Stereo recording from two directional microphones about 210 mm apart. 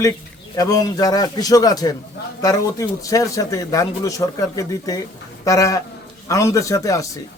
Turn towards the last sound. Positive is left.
turn(degrees=15)  # may be behind; listen again after turning